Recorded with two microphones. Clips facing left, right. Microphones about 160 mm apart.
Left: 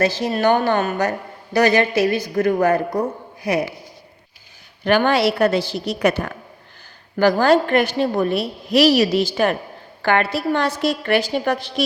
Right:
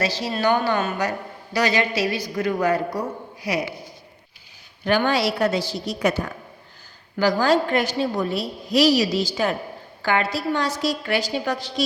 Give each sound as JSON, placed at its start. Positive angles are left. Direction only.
{"t": 0.0, "sound": "a woman's voice", "side_deg": 50}
{"t": 4.9, "sound": "a woman's voice", "side_deg": 65}